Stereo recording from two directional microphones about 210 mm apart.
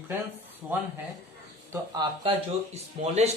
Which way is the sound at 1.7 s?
20° right (ahead or behind).